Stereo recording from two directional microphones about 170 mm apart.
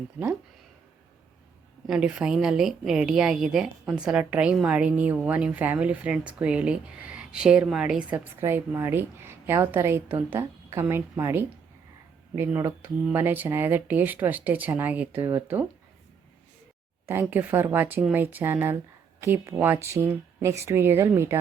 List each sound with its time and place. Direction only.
1.9 s a woman's voice: 5° right (ahead or behind)
17.1 s a woman's voice: 10° right (ahead or behind)